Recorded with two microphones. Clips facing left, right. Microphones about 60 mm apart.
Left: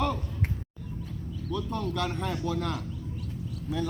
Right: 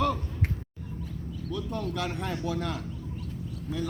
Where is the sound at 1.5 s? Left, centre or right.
Centre.